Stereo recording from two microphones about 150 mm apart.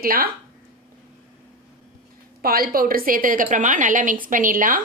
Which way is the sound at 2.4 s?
85° right.